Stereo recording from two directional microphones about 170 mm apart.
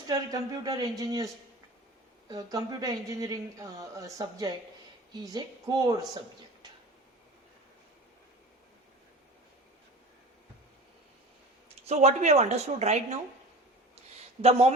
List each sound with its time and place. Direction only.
0.1 s speech: 20° right (ahead or behind)
2.3 s speech: 20° right (ahead or behind)
11.9 s a woman's voice: 40° right (ahead or behind)
14.4 s a woman's voice: 35° right (ahead or behind)